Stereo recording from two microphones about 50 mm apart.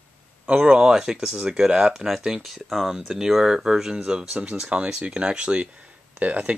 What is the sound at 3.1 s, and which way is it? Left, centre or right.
Speech, centre.